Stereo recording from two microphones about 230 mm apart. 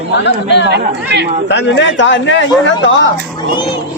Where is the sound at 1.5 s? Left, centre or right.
Left.